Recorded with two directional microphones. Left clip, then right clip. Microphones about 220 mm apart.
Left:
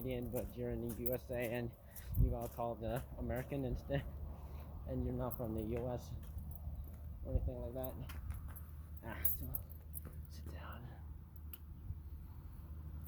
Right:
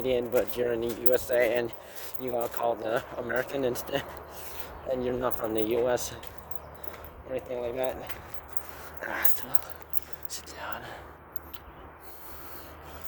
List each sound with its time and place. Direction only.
0.0 s speech: 25° right (ahead or behind)
5.0 s speech: 30° right (ahead or behind)
7.3 s speech: 25° right (ahead or behind)
9.1 s speech: 30° right (ahead or behind)
10.3 s speech: 20° right (ahead or behind)